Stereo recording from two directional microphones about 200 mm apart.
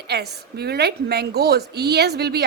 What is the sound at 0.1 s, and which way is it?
A woman's voice, 55° right (ahead or behind).